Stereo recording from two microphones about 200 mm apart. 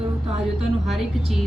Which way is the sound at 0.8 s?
Centre (ahead or behind).